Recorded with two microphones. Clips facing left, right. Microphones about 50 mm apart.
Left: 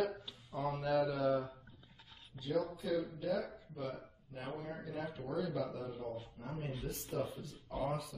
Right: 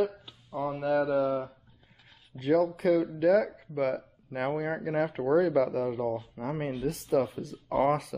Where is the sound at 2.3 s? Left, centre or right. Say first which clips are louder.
Right 12 dB; right.